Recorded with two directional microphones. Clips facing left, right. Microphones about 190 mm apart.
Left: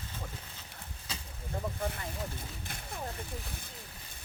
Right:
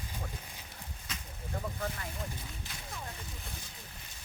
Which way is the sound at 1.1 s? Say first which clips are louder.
Left 2 dB; 30° left (ahead or behind).